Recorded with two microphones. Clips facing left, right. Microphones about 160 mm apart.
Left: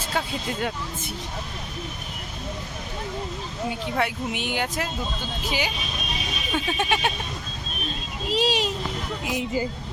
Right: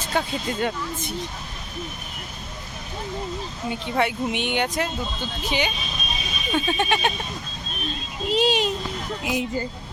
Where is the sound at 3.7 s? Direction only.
Centre (ahead or behind).